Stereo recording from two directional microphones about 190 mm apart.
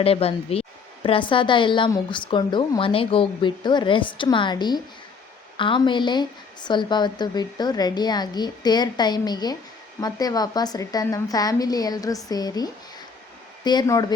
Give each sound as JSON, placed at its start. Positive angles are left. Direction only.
{"t": 0.0, "sound": "speech", "side_deg": 30}